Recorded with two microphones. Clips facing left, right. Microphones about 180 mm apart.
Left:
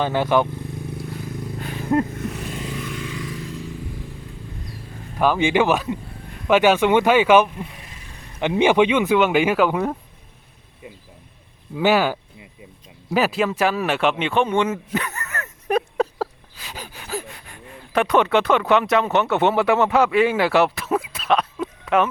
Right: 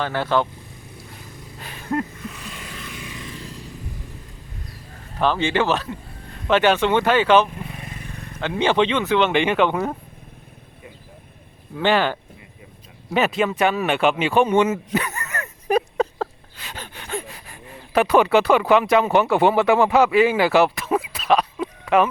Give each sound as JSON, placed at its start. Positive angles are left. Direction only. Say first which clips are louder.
{"t": 0.0, "sound": "speech", "louder": "left 3 dB", "side_deg": 15}
{"t": 5.2, "sound": "speech", "louder": "left 2 dB", "side_deg": 10}
{"t": 7.9, "sound": "vehicle", "louder": "right 8 dB", "side_deg": -55}
{"t": 8.4, "sound": "speech", "louder": "left 3 dB", "side_deg": 15}
{"t": 11.8, "sound": "speech", "louder": "left 1 dB", "side_deg": 10}
{"t": 14.9, "sound": "bow-wow", "louder": "right 2 dB", "side_deg": -15}
{"t": 15.7, "sound": "a sound", "louder": "right 1 dB", "side_deg": 0}
{"t": 16.7, "sound": "gasp", "louder": "even", "side_deg": 5}